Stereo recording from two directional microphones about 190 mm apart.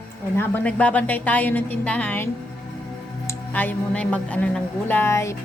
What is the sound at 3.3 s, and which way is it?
Speech, 10° left (ahead or behind).